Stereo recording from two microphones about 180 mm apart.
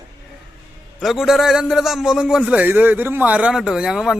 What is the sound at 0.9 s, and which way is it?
A man's voice, centre (ahead or behind).